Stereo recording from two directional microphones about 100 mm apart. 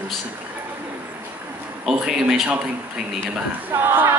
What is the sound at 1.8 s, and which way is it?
Speech, 5° right (ahead or behind).